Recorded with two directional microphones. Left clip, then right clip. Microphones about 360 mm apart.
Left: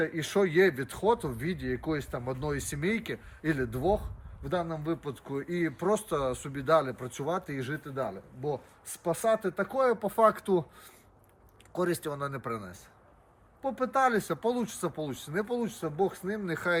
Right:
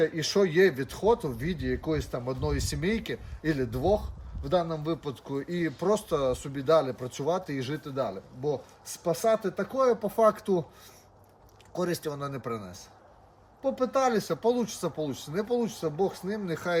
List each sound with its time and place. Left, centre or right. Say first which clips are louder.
0.0 s speech: right 3 dB; centre
11.7 s speech: even; centre